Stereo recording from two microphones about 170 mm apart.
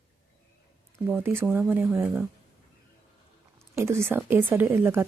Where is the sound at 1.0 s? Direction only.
10° right (ahead or behind).